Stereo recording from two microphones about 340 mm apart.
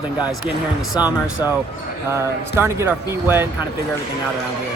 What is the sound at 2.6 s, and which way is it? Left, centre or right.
Speech, centre.